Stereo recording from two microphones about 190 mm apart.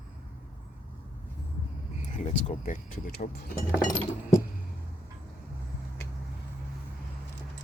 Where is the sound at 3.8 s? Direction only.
20° left (ahead or behind).